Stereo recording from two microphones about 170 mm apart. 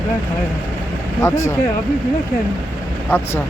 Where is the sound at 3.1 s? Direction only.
10° left (ahead or behind).